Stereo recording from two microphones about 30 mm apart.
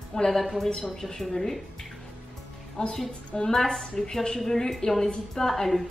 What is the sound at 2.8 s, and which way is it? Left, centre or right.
A woman's voice, left.